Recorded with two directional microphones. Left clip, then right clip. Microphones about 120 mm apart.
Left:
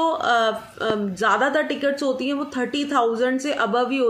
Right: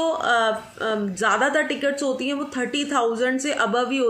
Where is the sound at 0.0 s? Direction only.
15° left (ahead or behind).